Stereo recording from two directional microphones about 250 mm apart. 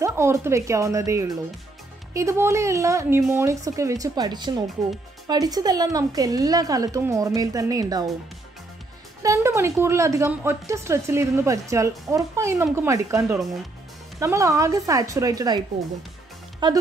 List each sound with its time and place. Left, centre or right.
0.0 s a woman's voice: centre
9.2 s a woman's voice: centre
16.6 s speech: centre